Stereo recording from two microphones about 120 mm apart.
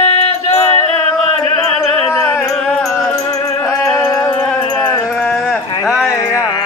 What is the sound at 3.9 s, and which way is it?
Music, 30° left (ahead or behind).